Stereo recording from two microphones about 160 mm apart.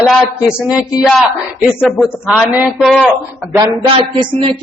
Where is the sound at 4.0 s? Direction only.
30° right (ahead or behind).